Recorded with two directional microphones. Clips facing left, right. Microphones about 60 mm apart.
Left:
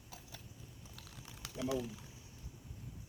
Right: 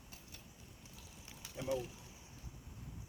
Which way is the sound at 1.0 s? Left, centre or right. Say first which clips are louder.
Left 5 dB; left.